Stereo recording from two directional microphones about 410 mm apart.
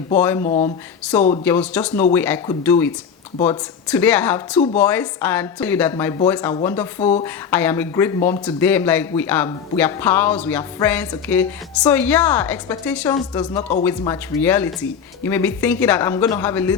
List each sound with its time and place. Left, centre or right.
0.2 s speech: centre
0.4 s speech: centre
1.1 s speech: centre